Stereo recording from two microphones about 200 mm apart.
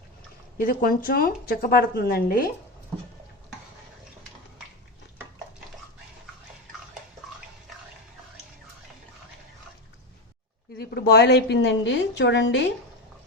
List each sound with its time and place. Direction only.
0.6 s a woman's voice: 45° left (ahead or behind)
10.8 s a woman's voice: 50° left (ahead or behind)